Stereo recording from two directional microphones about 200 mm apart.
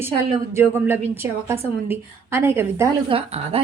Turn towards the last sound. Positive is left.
turn(degrees=-30)  # may be behind; listen again after turning